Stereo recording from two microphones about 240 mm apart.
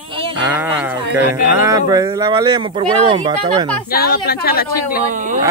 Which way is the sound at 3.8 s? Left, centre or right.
Left.